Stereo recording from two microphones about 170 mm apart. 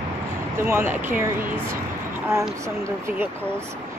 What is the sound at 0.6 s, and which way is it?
Speech, 15° right (ahead or behind).